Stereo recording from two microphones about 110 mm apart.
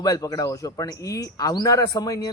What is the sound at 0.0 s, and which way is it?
Speech, 35° left (ahead or behind).